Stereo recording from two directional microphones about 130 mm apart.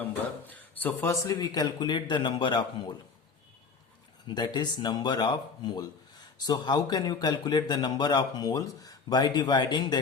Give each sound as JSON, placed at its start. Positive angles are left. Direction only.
{"t": 0.0, "sound": "a man's voice", "side_deg": 15}
{"t": 4.3, "sound": "speech", "side_deg": 35}